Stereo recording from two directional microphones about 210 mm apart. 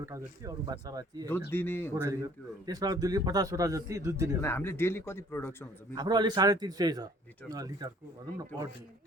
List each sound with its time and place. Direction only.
0.0 s a man's voice: 15° right (ahead or behind)
1.5 s speech: 10° left (ahead or behind)
1.9 s a man's voice: 15° right (ahead or behind)
4.4 s speech: 10° left (ahead or behind)
5.9 s a man's voice: 20° right (ahead or behind)